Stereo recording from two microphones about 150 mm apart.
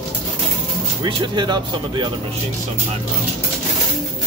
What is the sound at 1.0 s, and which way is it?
Speech, 30° right (ahead or behind).